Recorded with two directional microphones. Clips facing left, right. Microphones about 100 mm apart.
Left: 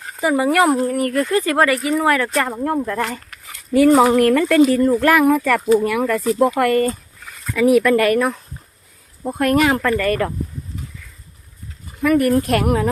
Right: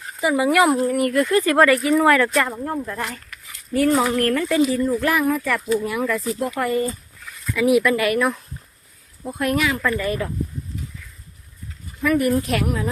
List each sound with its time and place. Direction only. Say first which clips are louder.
0.2 s speech: left 1 dB; 40° left (ahead or behind)
3.7 s speech: left 6 dB; 85° left; by 6.9 s 65° left (ahead or behind)
7.8 s speech: left 4 dB; 45° left (ahead or behind); by 10.3 s 60° left (ahead or behind)
12.0 s speech: left 4 dB; 60° left (ahead or behind)